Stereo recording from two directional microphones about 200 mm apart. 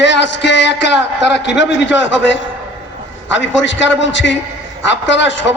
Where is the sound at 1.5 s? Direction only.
65° left (ahead or behind).